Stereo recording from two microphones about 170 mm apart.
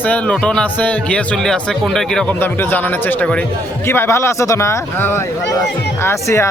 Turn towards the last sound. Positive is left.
turn(degrees=15)  # may be behind; listen again after turning